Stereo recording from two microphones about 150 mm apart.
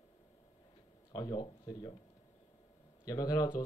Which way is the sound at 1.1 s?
25° left (ahead or behind).